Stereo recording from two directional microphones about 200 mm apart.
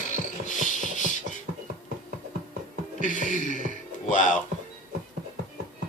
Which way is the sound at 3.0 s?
40° left (ahead or behind).